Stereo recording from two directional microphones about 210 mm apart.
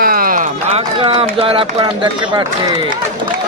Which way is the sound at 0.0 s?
45° right (ahead or behind).